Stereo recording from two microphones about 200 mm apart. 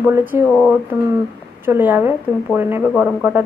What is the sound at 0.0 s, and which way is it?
Speech, 10° right (ahead or behind).